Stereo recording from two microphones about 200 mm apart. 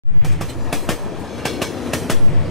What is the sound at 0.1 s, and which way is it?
Train, centre (ahead or behind).